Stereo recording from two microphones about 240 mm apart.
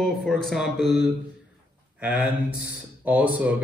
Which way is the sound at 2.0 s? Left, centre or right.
Centre.